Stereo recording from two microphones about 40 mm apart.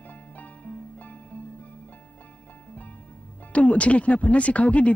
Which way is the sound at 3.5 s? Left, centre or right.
Left.